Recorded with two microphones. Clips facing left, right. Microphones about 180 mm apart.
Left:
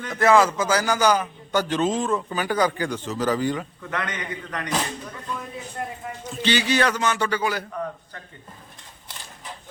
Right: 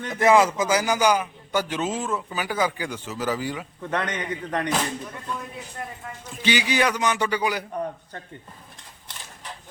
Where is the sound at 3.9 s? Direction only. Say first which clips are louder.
Right 3 dB; 30° right (ahead or behind).